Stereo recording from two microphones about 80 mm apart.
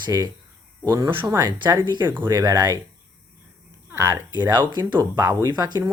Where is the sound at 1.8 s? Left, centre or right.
Right.